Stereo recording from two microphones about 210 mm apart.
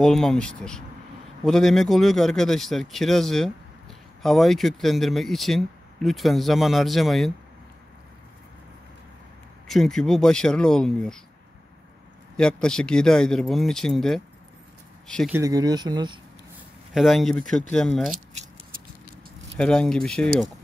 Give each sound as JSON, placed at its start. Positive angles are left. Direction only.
{"t": 0.0, "sound": "speech", "side_deg": 0}
{"t": 9.7, "sound": "speech", "side_deg": 0}
{"t": 12.4, "sound": "speech", "side_deg": 5}
{"t": 15.3, "sound": "speech", "side_deg": -15}
{"t": 16.9, "sound": "speech", "side_deg": 0}
{"t": 19.5, "sound": "speech", "side_deg": 5}